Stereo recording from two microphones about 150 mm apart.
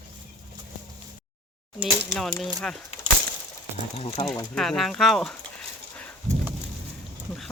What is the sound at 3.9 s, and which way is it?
Speech, 40° left (ahead or behind).